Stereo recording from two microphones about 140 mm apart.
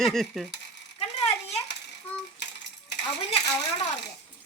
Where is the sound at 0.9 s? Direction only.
50° left (ahead or behind).